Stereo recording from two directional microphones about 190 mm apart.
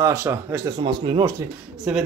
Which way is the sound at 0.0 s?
15° right (ahead or behind).